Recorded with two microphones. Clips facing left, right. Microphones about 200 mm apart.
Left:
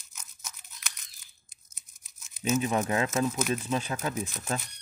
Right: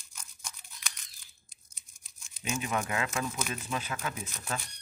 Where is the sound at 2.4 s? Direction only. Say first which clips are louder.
Left 6 dB; 40° left (ahead or behind).